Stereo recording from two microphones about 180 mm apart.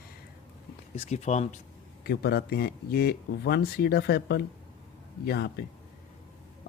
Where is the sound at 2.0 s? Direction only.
65° left (ahead or behind).